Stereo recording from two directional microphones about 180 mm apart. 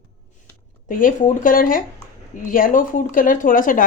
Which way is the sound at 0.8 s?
45° left (ahead or behind).